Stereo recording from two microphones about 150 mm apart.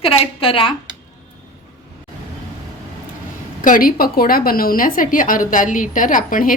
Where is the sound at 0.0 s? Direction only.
40° left (ahead or behind).